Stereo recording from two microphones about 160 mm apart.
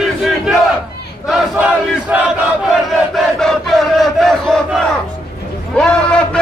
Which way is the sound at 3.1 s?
Centre (ahead or behind).